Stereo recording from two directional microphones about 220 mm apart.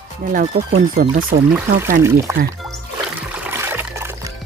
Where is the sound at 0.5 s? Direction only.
45° right (ahead or behind).